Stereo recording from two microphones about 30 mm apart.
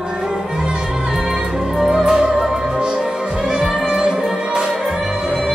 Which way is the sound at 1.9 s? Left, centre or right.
Centre.